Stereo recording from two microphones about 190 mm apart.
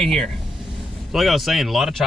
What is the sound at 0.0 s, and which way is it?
Speech, centre (ahead or behind).